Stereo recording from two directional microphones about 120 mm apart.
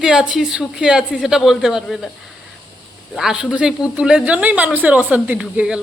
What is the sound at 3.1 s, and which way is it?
A woman's voice, 5° right (ahead or behind).